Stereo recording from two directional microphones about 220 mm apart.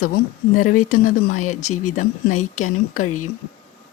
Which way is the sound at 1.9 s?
35° left (ahead or behind).